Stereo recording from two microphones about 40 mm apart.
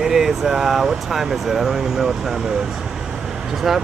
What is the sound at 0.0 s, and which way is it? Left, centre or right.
Speech, centre.